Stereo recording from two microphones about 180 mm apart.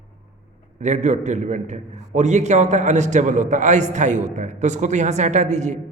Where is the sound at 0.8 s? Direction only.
40° right (ahead or behind).